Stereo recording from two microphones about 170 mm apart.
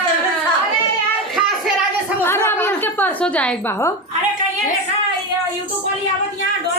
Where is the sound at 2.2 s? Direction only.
15° left (ahead or behind).